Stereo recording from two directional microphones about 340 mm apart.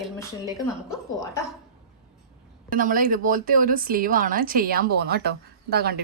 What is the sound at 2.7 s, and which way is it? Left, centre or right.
A woman's voice, right.